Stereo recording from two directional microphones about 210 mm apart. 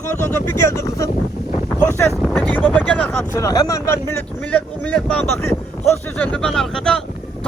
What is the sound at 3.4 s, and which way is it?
Speech, 15° left (ahead or behind).